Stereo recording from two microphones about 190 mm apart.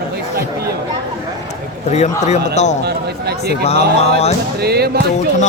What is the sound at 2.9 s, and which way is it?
Speech, 60° right (ahead or behind).